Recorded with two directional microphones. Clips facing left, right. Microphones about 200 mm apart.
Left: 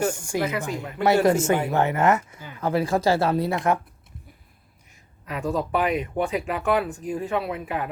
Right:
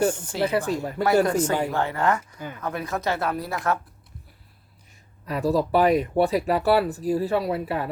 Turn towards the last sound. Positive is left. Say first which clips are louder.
# right 2 dB
turn(degrees=-35)  # may be behind; listen again after turning